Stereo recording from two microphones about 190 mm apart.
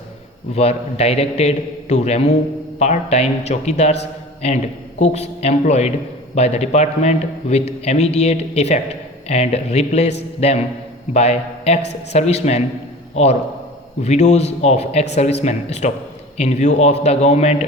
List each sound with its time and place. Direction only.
0.5 s a man's voice: 35° left (ahead or behind)
4.9 s a man's voice: 35° left (ahead or behind)
14.0 s a man's voice: 35° left (ahead or behind)